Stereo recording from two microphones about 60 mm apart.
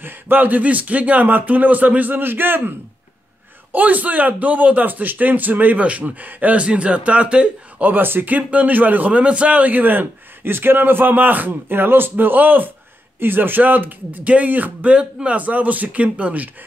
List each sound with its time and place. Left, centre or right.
0.0 s speech: right
3.7 s speech: right
7.9 s a man's voice: right
8.4 s a man's voice: right